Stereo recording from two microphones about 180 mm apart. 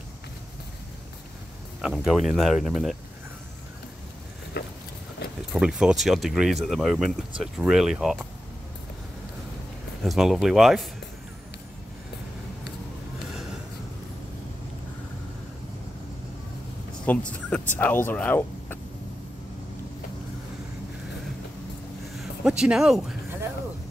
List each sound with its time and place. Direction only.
1.8 s speech: 5° right (ahead or behind)
4.6 s a sound: 65° left (ahead or behind)
5.5 s speech: 5° right (ahead or behind)
10.0 s speech: centre (ahead or behind)
17.0 s speech: 5° left (ahead or behind)
22.2 s speech: 5° right (ahead or behind)